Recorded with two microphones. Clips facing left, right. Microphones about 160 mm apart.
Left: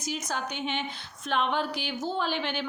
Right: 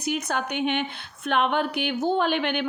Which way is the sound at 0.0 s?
60° right (ahead or behind).